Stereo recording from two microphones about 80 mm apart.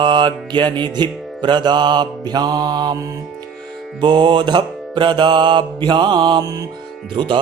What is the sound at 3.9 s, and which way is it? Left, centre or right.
Mantra, right.